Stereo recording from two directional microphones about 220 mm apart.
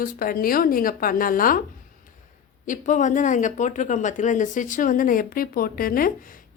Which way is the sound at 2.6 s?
35° left (ahead or behind).